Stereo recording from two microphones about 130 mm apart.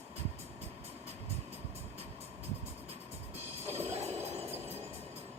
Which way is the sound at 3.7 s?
15° right (ahead or behind).